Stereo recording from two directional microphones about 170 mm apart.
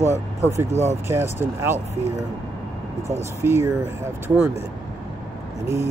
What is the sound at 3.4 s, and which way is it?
Speech, 15° right (ahead or behind).